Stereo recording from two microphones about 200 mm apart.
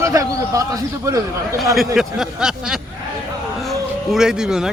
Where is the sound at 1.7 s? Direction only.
Centre (ahead or behind).